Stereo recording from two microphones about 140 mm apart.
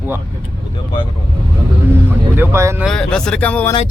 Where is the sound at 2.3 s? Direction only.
15° right (ahead or behind).